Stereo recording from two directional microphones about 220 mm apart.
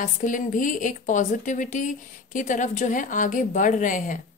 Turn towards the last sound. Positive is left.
turn(degrees=35)  # may be behind; listen again after turning